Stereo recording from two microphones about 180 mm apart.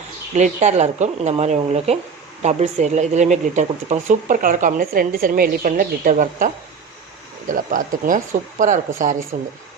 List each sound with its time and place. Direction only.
0.3 s speech: 40° right (ahead or behind)